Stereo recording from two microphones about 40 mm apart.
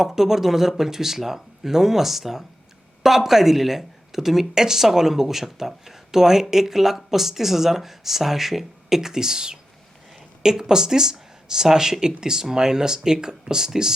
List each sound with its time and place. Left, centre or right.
0.0 s speech: centre